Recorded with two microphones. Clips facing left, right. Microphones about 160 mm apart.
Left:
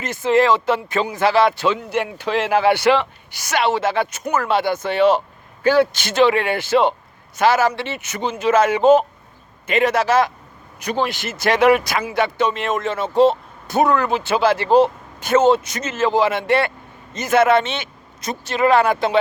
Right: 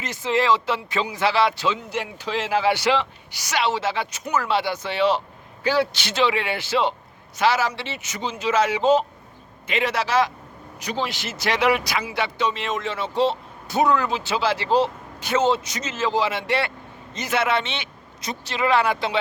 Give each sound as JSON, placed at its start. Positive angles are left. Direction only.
{"t": 0.0, "sound": "speech", "side_deg": 50}